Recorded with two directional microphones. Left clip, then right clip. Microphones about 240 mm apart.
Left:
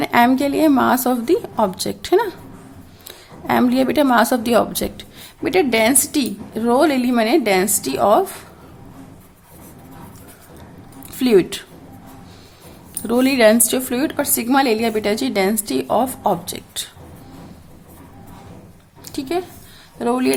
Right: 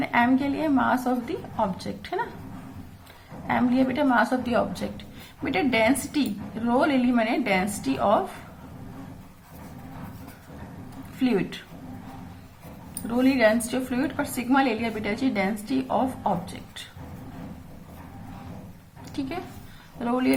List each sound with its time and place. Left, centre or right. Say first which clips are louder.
0.0 s a woman's voice: left 8 dB; left
3.4 s a woman's voice: left 7 dB; left
11.2 s a woman's voice: left 11 dB; left
13.1 s a woman's voice: left 8 dB; left
19.0 s a sound: left 9 dB; left
20.0 s a woman's voice: left 7 dB; left